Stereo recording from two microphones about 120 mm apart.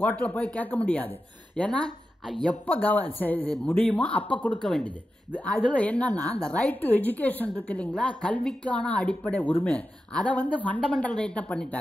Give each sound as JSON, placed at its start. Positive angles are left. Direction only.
{"t": 0.0, "sound": "a woman's voice", "side_deg": 10}
{"t": 2.6, "sound": "a woman's voice", "side_deg": 15}